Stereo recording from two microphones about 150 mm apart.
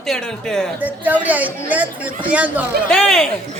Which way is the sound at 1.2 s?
10° right (ahead or behind).